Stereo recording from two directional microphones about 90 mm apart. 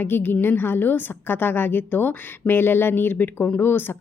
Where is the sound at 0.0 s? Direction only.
25° left (ahead or behind).